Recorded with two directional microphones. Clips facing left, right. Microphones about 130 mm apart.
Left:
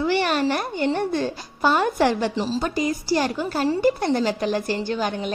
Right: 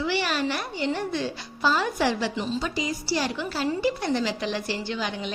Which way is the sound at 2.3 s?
35° left (ahead or behind).